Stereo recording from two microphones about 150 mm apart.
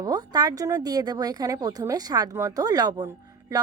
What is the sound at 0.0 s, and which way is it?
Speech, 25° right (ahead or behind).